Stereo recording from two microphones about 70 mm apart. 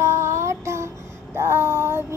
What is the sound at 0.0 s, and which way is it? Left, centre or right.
Music, right.